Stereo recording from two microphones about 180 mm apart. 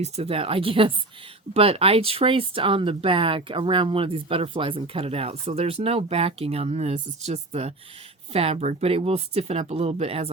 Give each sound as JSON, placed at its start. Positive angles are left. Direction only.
{"t": 0.0, "sound": "speech", "side_deg": -35}